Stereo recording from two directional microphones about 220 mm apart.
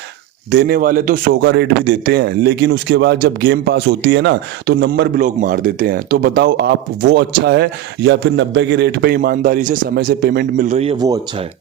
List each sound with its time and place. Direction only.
0.5 s a man's voice: 40° right (ahead or behind)
10.9 s speech: 15° right (ahead or behind)